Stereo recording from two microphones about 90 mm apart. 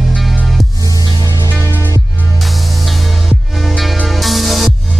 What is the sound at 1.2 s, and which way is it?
Music, 40° right (ahead or behind).